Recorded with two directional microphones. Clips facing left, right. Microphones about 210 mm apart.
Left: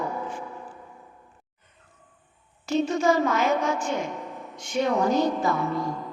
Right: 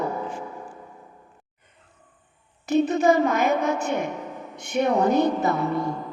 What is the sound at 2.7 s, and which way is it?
Child singing, 55° right (ahead or behind).